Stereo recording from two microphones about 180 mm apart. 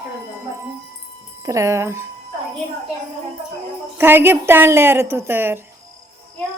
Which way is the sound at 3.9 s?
10° right (ahead or behind).